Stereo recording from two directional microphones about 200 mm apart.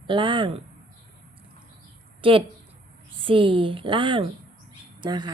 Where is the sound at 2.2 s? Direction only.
25° right (ahead or behind).